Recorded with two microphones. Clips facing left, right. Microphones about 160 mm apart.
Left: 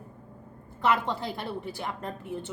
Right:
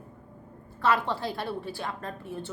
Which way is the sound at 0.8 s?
20° left (ahead or behind).